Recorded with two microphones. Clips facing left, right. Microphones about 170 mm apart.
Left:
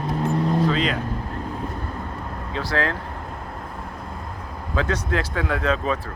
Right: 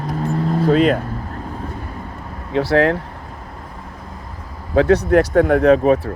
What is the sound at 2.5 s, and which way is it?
Speech, 65° right (ahead or behind).